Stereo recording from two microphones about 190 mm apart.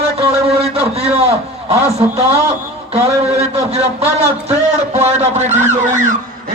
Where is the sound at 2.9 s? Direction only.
35° right (ahead or behind).